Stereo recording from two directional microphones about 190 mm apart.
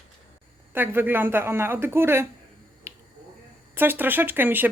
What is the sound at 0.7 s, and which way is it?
Speech, 10° right (ahead or behind).